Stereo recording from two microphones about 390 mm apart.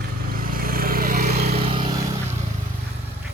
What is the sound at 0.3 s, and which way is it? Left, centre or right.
Vehicle, right.